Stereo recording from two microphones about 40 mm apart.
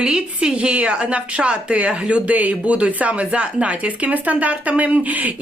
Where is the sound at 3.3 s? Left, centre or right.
Right.